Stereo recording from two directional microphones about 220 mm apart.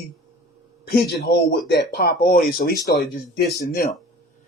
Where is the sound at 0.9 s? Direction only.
50° left (ahead or behind).